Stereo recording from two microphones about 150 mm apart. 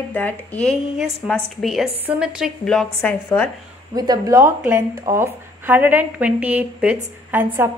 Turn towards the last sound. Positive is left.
turn(degrees=-15)  # may be behind; listen again after turning